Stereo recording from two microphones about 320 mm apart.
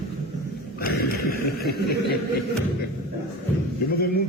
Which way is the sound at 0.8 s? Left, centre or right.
Left.